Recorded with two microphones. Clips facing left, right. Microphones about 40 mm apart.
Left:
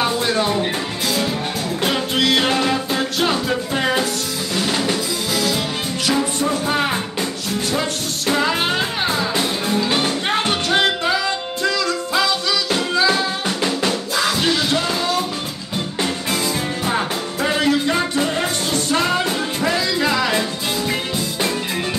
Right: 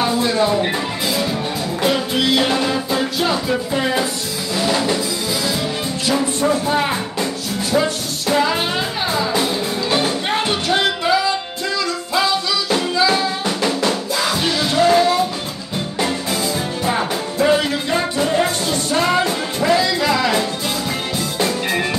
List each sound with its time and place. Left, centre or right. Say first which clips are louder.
0.6 s music: right 2 dB; centre
1.9 s music: right 1 dB; left
9.0 s music: right 1 dB; left
14.9 s music: right 8 dB; right
18.7 s music: right 1 dB; left